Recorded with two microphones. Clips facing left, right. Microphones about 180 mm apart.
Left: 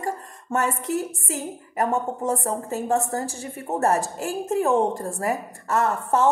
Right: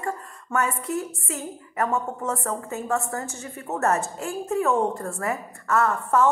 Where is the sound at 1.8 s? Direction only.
30° left (ahead or behind).